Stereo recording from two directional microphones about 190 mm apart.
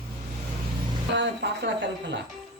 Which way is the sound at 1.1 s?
65° right (ahead or behind).